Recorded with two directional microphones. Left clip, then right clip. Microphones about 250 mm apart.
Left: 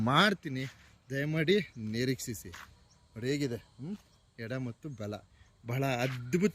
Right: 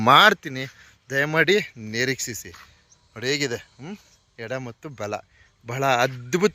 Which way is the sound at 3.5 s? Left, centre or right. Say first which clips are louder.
Right 10 dB; right.